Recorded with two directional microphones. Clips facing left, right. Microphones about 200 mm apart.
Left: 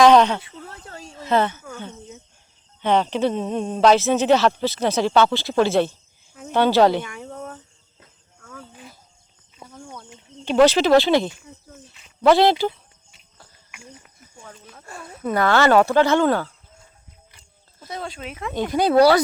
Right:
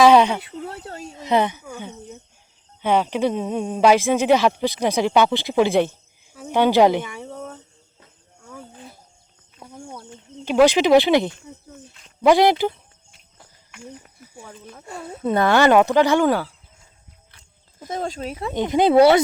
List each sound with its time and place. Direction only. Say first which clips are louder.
0.0 s speech: even; 10° right (ahead or behind)
8.4 s cricket: right 2 dB; 20° right (ahead or behind)
9.7 s a sound: right 3 dB; 30° right (ahead or behind)
10.4 s speech: even; 10° right (ahead or behind)
14.8 s speech: right 3 dB; 25° right (ahead or behind)
17.8 s speech: right 5 dB; 45° right (ahead or behind)
18.5 s speech: right 2 dB; 20° right (ahead or behind)